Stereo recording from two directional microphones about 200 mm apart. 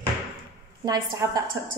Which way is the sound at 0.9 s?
20° right (ahead or behind).